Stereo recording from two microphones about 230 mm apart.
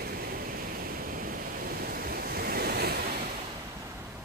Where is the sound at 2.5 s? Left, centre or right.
Right.